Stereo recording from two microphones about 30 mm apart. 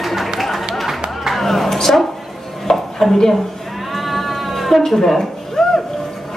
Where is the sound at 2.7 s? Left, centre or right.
Centre.